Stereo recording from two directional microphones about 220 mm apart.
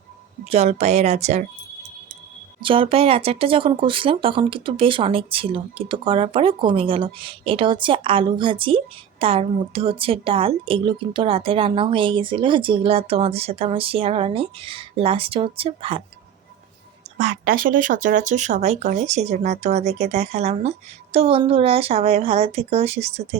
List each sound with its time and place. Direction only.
0.5 s speech: 30° right (ahead or behind)
2.6 s speech: 25° right (ahead or behind)
17.2 s speech: 35° right (ahead or behind)